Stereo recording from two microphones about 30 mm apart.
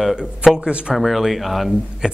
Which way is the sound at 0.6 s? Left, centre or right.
Right.